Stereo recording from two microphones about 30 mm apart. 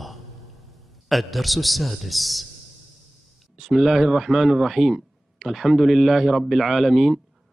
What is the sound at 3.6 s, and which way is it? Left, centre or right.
Speech, centre.